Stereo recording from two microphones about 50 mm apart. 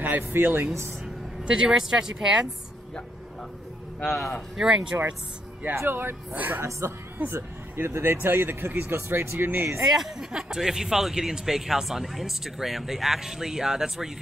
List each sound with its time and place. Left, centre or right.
0.0 s speech: right
1.4 s speech: centre
4.0 s speech: centre
4.6 s speech: centre
5.9 s speech: right
6.3 s speech: right
6.8 s a woman's voice: right
7.2 s speech: right
7.7 s speech: right
9.8 s speech: centre